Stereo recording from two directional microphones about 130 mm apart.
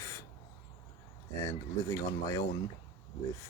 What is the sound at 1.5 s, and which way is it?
Speech, 25° left (ahead or behind).